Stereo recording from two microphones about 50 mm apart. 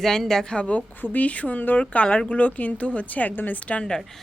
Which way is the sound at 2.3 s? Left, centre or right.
Left.